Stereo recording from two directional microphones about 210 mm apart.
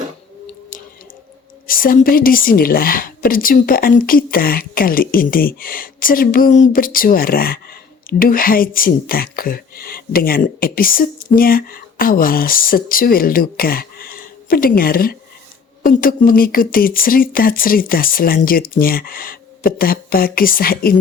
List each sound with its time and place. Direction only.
1.6 s speech: 40° left (ahead or behind)